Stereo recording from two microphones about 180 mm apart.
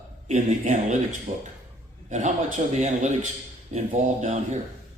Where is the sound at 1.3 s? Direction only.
30° right (ahead or behind).